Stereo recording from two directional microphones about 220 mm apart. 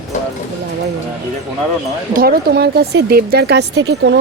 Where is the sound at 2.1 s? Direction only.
45° right (ahead or behind).